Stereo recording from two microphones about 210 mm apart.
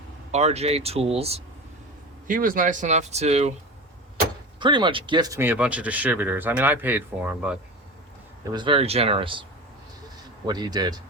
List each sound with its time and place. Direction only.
0.3 s speech: 30° right (ahead or behind)
2.2 s speech: 40° right (ahead or behind)
4.6 s speech: 20° right (ahead or behind); by 7.6 s 5° right (ahead or behind)
8.5 s speech: 25° right (ahead or behind)